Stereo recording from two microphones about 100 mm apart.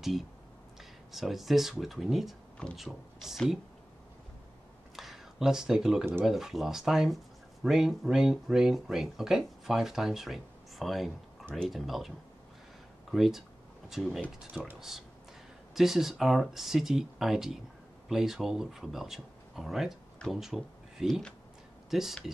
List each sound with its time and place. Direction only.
0.7 s speech: centre (ahead or behind)
4.9 s a sound: centre (ahead or behind)
6.2 s speech: centre (ahead or behind)
13.1 s speech: centre (ahead or behind)
14.5 s speech: 15° right (ahead or behind)
14.8 s speech: 5° right (ahead or behind)